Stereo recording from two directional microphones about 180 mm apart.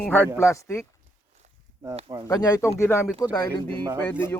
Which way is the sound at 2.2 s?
20° left (ahead or behind).